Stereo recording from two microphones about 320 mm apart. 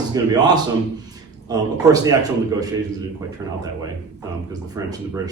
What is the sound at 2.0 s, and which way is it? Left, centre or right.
Speech, centre.